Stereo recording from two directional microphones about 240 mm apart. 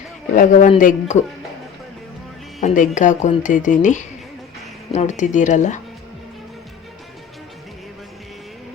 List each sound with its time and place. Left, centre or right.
0.3 s speech: left
2.6 s speech: left